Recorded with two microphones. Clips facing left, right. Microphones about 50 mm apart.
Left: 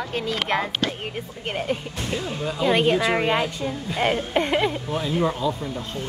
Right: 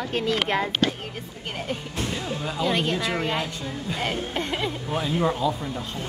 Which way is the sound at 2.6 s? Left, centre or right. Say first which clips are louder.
Left 6 dB; centre.